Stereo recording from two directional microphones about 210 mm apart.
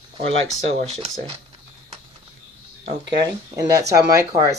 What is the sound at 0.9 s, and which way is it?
Speech, 25° right (ahead or behind).